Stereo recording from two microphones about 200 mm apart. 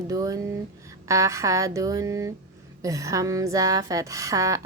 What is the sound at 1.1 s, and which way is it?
Speech, 15° right (ahead or behind).